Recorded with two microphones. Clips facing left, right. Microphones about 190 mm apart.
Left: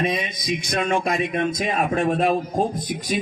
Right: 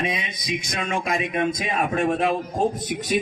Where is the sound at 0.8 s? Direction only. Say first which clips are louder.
Left 4 dB; 35° left (ahead or behind).